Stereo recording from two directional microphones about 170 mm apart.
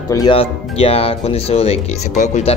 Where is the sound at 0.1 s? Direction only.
30° left (ahead or behind).